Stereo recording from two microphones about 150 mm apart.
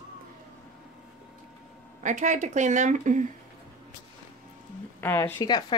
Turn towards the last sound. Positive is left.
turn(degrees=25)  # may be behind; listen again after turning